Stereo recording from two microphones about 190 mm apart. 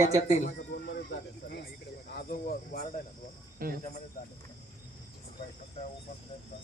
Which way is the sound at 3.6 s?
50° right (ahead or behind).